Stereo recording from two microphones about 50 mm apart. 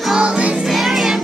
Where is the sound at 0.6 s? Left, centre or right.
Centre.